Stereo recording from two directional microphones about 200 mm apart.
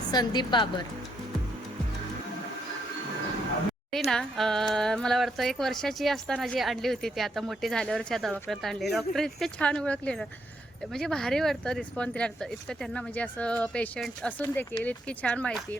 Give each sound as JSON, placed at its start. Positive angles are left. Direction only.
{"t": 0.1, "sound": "a woman's voice", "side_deg": 20}
{"t": 3.9, "sound": "speech", "side_deg": 0}